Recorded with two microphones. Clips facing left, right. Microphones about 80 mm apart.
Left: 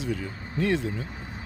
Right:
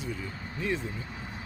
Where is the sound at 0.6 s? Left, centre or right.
Left.